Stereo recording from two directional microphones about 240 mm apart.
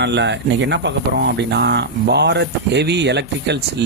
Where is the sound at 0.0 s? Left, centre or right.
Right.